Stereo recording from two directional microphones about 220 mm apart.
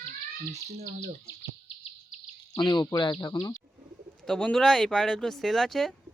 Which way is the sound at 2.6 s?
20° left (ahead or behind).